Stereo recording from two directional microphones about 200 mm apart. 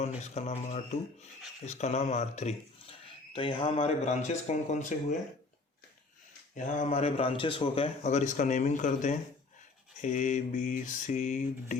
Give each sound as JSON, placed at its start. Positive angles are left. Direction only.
{"t": 0.2, "sound": "a man's voice", "side_deg": 35}
{"t": 6.6, "sound": "a man's voice", "side_deg": 35}